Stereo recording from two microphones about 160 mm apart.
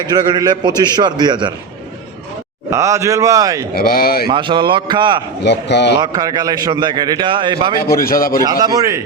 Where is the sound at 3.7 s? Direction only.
70° left (ahead or behind).